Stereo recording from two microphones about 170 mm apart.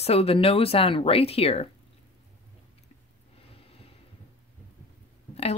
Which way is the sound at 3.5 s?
35° left (ahead or behind).